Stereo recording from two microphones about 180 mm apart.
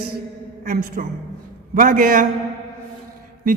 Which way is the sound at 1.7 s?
55° right (ahead or behind).